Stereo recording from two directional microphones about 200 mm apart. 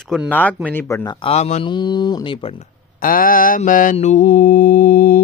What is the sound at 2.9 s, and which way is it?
Mantra, 45° left (ahead or behind).